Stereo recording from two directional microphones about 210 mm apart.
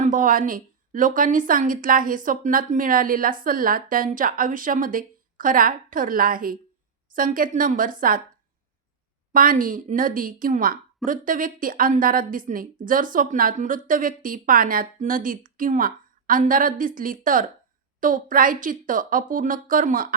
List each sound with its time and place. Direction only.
0.0 s a woman's voice: 40° right (ahead or behind)
9.3 s a woman's voice: 40° right (ahead or behind)